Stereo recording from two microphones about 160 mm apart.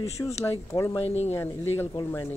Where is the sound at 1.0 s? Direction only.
40° left (ahead or behind).